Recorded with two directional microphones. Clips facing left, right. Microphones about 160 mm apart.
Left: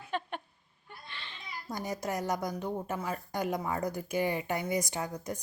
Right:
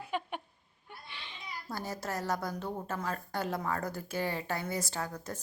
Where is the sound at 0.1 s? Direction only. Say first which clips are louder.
Left 1 dB; 10° right (ahead or behind).